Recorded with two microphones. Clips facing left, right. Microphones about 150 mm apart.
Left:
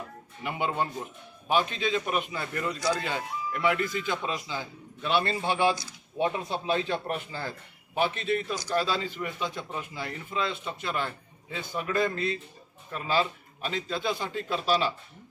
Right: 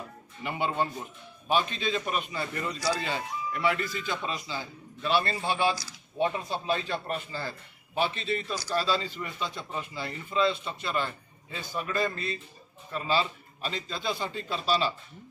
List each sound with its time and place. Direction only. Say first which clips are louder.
0.4 s a man's voice: even; 10° left (ahead or behind)
2.4 s speech: even; 5° right (ahead or behind)
3.0 s speech: even; 5° left (ahead or behind)
3.7 s a man's voice: left 3 dB; 15° left (ahead or behind)
8.1 s a man's voice: left 3 dB; 55° left (ahead or behind)
8.4 s a man's voice: even; 15° left (ahead or behind)